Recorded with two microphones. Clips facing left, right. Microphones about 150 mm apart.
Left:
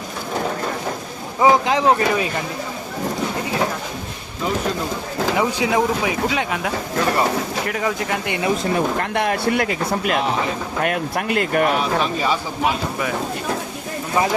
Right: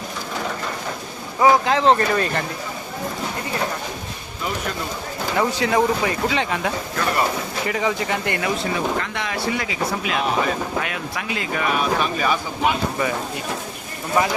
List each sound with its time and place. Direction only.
1.4 s speech: 15° left (ahead or behind)
5.4 s speech: 10° left (ahead or behind)
8.3 s speech: 25° left (ahead or behind)
8.7 s speech: 55° left (ahead or behind)
11.8 s speech: 25° left (ahead or behind)
12.6 s speech: centre (ahead or behind)